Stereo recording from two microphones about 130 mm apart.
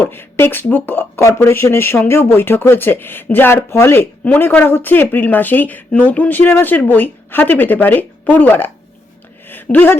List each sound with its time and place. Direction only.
0.0 s speech: 15° left (ahead or behind)
9.7 s speech: 15° left (ahead or behind)